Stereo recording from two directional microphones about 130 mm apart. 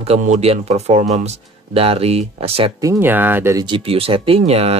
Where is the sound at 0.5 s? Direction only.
55° right (ahead or behind).